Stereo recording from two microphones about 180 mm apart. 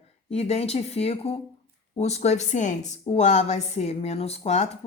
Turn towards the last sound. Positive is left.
turn(degrees=35)  # may be behind; listen again after turning